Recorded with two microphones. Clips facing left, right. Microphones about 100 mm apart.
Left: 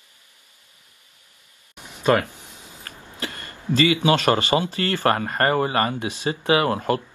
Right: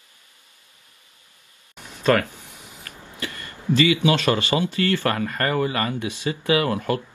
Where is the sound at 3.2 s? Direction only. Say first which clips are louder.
Left 1 dB; 35° left (ahead or behind).